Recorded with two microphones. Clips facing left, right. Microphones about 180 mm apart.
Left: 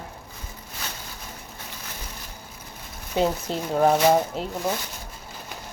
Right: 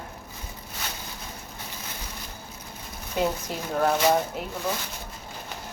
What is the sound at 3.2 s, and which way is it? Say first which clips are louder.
Speech: left 3 dB; 25° left (ahead or behind).